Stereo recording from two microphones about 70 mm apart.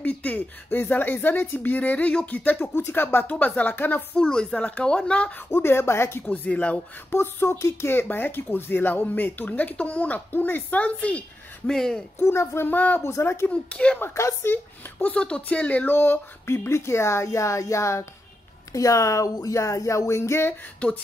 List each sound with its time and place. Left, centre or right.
0.0 s speech: left
4.2 s speech: centre
5.5 s speech: left
6.2 s speech: left
7.1 s speech: left; by 12.0 s centre
12.2 s speech: left
13.0 s speech: left
13.5 s speech: centre
14.1 s speech: left
14.5 s speech: left
15.1 s speech: centre; by 20.5 s left